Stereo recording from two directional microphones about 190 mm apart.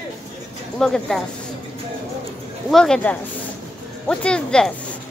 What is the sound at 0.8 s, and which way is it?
Speech, centre (ahead or behind).